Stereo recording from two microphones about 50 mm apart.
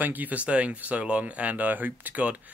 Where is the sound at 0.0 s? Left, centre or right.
Right.